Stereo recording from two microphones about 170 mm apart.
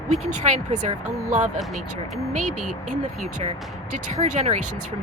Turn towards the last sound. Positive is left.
turn(degrees=-45)  # may be behind; listen again after turning